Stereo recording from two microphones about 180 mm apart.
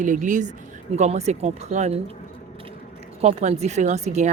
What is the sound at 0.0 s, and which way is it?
A woman's voice, 45° right (ahead or behind).